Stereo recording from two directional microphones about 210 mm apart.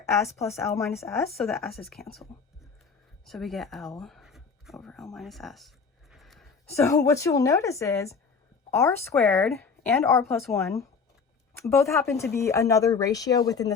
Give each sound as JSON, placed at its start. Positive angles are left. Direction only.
{"t": 0.0, "sound": "speech", "side_deg": 15}
{"t": 1.0, "sound": "speech", "side_deg": 0}
{"t": 3.2, "sound": "speech", "side_deg": 0}
{"t": 6.7, "sound": "speech", "side_deg": 15}